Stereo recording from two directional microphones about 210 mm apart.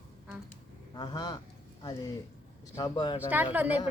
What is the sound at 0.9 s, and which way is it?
Speech, 20° left (ahead or behind).